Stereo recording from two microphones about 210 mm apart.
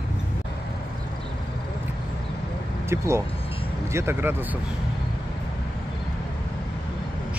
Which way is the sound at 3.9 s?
10° right (ahead or behind).